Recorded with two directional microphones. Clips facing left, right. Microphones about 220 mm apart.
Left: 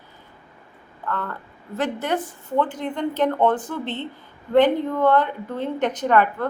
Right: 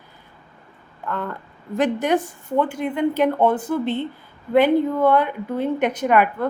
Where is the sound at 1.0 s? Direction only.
15° right (ahead or behind).